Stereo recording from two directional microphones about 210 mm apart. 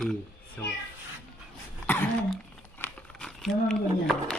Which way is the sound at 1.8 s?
10° left (ahead or behind).